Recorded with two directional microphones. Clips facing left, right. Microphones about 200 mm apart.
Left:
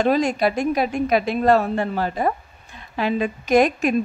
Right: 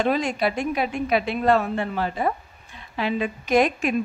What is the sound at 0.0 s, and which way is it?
A woman's voice, 40° left (ahead or behind).